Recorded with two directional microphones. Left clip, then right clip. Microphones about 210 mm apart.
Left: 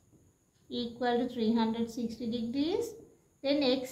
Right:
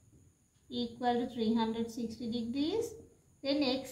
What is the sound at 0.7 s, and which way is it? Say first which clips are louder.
A woman's voice: left 2 dB; 25° left (ahead or behind).